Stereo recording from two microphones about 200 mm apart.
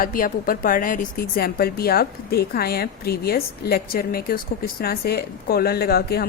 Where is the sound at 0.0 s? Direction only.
45° left (ahead or behind).